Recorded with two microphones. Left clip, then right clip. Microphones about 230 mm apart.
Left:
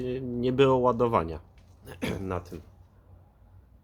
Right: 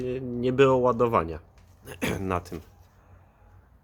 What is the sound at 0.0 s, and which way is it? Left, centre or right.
Speech, centre.